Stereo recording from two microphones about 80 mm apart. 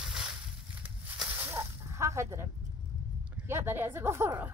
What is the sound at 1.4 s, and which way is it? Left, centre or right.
Snake, right.